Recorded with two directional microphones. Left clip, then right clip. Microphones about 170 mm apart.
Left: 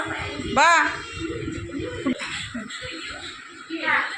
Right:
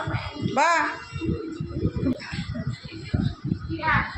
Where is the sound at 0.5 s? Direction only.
Centre (ahead or behind).